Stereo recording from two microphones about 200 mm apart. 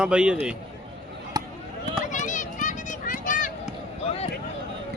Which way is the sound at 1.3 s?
20° right (ahead or behind).